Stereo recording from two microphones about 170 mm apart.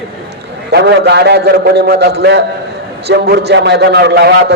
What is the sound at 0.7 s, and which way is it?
A man's voice, 80° right.